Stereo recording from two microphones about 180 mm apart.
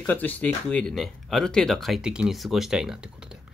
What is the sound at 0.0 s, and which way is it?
Speech, 10° left (ahead or behind).